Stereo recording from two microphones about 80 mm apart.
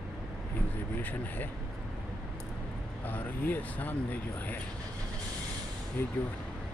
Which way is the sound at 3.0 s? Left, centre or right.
Left.